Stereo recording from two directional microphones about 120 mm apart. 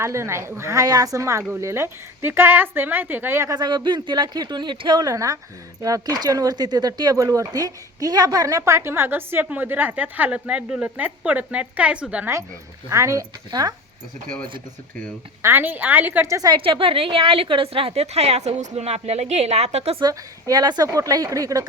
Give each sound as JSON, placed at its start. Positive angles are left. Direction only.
{"t": 0.0, "sound": "speech", "side_deg": -20}
{"t": 3.6, "sound": "speech", "side_deg": -40}
{"t": 12.9, "sound": "speech", "side_deg": -25}
{"t": 15.4, "sound": "a woman's voice", "side_deg": -20}
{"t": 16.5, "sound": "a woman's voice", "side_deg": -45}
{"t": 20.0, "sound": "speech", "side_deg": -35}